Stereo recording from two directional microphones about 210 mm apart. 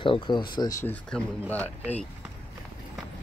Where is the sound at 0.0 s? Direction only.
20° left (ahead or behind).